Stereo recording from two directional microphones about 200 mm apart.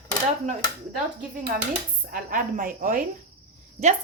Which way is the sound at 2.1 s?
45° right (ahead or behind).